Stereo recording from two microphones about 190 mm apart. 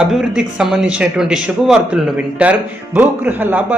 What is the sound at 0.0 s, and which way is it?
A man's voice, 5° right (ahead or behind).